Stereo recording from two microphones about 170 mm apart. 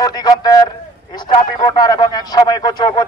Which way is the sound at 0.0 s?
20° left (ahead or behind).